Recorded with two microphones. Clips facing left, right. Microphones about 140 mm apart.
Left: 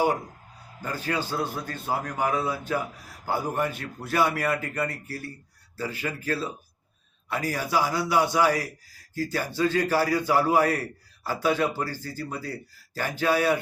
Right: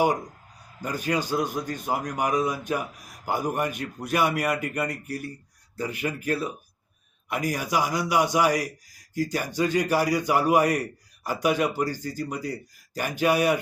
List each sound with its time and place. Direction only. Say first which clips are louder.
0.8 s a man's voice: right 2 dB; 15° right (ahead or behind)